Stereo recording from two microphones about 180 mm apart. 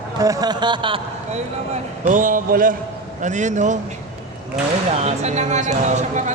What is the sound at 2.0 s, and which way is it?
A man's voice, 45° right (ahead or behind).